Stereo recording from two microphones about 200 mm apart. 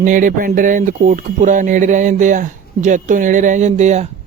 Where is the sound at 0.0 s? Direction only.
40° right (ahead or behind).